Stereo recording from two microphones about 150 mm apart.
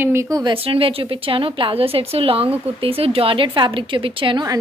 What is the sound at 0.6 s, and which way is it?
A woman's voice, 40° right (ahead or behind).